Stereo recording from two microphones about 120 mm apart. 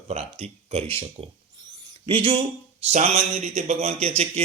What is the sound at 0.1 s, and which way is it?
Speech, 65° right (ahead or behind).